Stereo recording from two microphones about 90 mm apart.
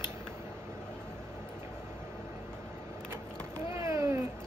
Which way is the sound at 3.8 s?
35° right (ahead or behind).